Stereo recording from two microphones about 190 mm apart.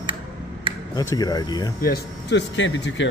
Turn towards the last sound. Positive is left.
turn(degrees=75)  # may be behind; listen again after turning